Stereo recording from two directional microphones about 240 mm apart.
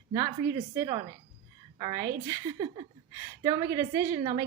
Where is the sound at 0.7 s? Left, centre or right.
Centre.